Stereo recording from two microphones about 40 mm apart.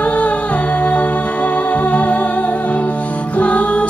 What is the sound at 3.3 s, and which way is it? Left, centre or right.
Music, left.